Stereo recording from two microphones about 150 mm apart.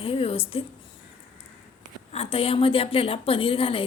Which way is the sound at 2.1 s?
40° left (ahead or behind).